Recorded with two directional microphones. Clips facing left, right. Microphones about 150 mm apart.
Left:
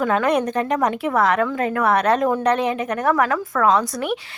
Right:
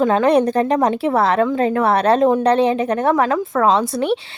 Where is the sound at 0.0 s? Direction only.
30° right (ahead or behind).